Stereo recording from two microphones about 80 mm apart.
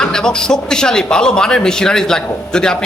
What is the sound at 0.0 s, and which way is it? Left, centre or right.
A woman's voice, centre.